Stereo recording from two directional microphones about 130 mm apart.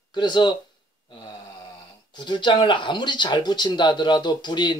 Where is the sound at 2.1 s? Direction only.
35° left (ahead or behind).